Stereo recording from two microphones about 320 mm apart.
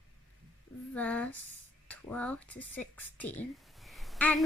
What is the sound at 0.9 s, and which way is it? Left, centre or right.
A woman's voice, centre.